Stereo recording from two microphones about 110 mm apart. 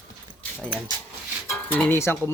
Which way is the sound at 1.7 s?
15° left (ahead or behind).